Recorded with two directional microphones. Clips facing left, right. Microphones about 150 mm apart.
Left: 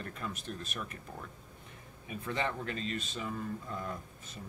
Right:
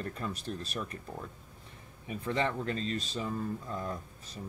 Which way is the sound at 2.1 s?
35° right (ahead or behind).